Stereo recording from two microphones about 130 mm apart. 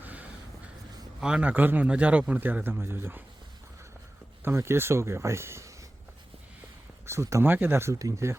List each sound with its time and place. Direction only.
0.0 s a sound: 10° right (ahead or behind)
1.2 s a man's voice: 10° right (ahead or behind)
4.4 s speech: 20° right (ahead or behind)
7.0 s speech: 20° right (ahead or behind)